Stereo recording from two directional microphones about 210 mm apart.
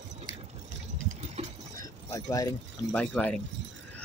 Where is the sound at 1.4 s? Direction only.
30° right (ahead or behind).